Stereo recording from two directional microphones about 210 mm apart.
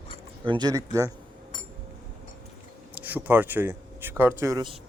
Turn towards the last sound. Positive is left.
turn(degrees=-20)  # may be behind; listen again after turning